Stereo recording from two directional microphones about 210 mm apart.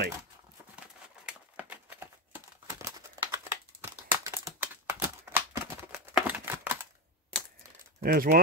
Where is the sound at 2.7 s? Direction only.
10° right (ahead or behind).